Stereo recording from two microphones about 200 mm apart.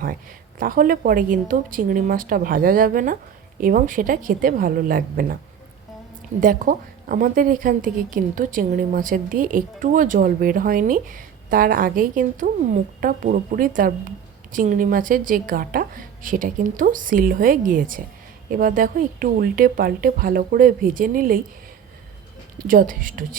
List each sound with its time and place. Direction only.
0.6 s a woman's voice: 45° right (ahead or behind)
6.4 s a woman's voice: 45° right (ahead or behind)
22.5 s a woman's voice: 45° right (ahead or behind)